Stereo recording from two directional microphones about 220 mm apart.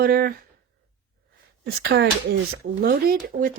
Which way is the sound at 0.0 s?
45° right (ahead or behind).